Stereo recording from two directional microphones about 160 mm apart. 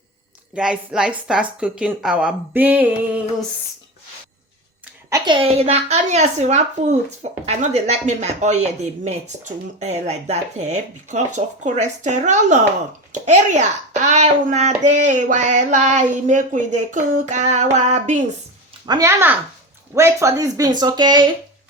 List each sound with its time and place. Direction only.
0.5 s a woman's voice: 5° right (ahead or behind)
5.0 s a woman's voice: 25° right (ahead or behind); by 18.2 s 45° right (ahead or behind)
18.9 s a woman's voice: 20° right (ahead or behind)